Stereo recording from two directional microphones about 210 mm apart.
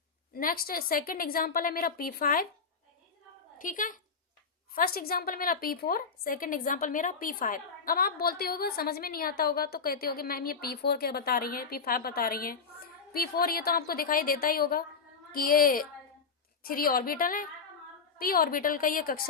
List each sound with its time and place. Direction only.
0.3 s a woman's voice: 45° left (ahead or behind)
3.6 s a woman's voice: 40° left (ahead or behind)